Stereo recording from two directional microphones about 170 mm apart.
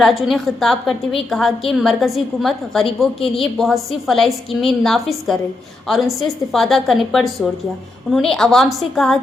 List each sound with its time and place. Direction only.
0.0 s a woman's voice: centre (ahead or behind)